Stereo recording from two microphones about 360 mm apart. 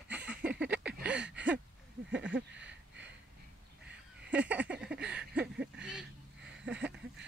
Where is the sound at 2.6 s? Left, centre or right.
Right.